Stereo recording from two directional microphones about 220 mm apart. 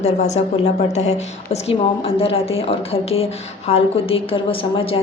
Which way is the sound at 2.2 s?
25° left (ahead or behind).